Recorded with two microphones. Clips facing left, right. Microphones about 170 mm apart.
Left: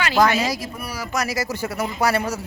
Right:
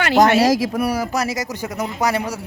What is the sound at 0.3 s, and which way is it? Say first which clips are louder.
Speech: right 7 dB; 60° right (ahead or behind).